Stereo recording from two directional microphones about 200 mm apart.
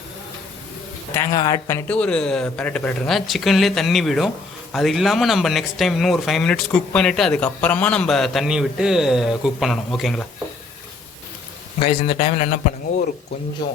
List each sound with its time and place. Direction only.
1.1 s speech: 15° left (ahead or behind)
11.8 s a man's voice: 25° left (ahead or behind)